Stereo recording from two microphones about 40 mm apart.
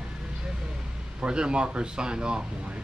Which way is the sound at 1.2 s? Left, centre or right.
Right.